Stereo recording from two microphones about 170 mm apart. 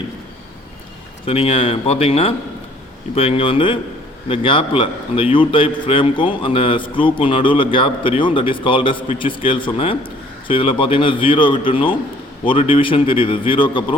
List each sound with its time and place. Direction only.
1.2 s a man's voice: 35° left (ahead or behind)